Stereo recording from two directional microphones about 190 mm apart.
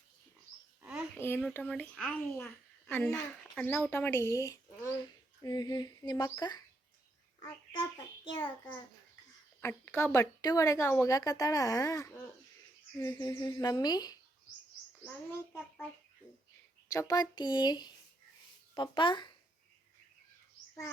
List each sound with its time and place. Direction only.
0.8 s a sound: 5° right (ahead or behind)
1.2 s a woman's voice: 10° left (ahead or behind)
8.2 s speech: 25° left (ahead or behind)
9.6 s a woman's voice: 15° left (ahead or behind)
16.9 s speech: 20° left (ahead or behind)